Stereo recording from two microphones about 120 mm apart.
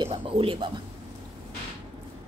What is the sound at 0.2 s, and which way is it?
Speech, 50° right (ahead or behind).